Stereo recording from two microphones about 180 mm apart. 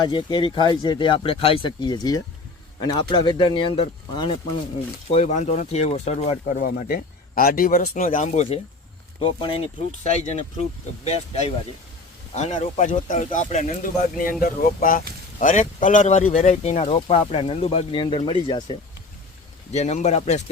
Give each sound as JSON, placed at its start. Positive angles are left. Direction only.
{"t": 0.0, "sound": "speech", "side_deg": 25}
{"t": 5.1, "sound": "speech", "side_deg": 40}
{"t": 6.5, "sound": "speech", "side_deg": 45}
{"t": 19.7, "sound": "speech", "side_deg": 40}